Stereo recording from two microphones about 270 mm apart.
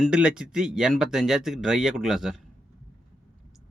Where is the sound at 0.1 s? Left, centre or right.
Centre.